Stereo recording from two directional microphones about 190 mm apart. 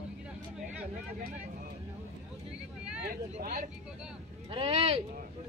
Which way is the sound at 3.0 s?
50° right (ahead or behind).